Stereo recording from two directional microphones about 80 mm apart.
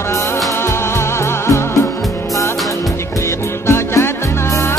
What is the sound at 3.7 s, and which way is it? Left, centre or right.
Music, left.